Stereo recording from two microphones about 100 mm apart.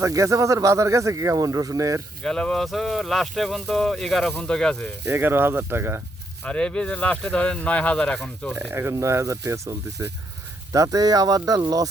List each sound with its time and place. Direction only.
0.0 s speech: 30° right (ahead or behind)
2.2 s speech: 5° left (ahead or behind)
5.0 s speech: 25° right (ahead or behind)
6.4 s speech: 10° left (ahead or behind)
8.6 s speech: 25° right (ahead or behind); by 11.9 s 40° right (ahead or behind)